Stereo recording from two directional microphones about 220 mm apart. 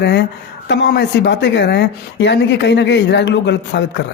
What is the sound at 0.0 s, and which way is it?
Speech, 50° left (ahead or behind).